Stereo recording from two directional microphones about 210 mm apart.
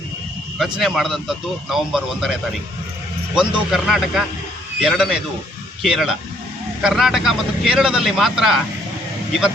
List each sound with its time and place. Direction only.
0.6 s speech: centre (ahead or behind)
3.3 s speech: 5° right (ahead or behind)